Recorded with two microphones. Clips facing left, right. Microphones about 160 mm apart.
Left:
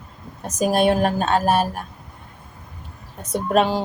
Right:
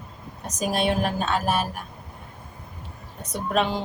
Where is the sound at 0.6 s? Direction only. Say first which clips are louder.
Left 6 dB; 45° left (ahead or behind).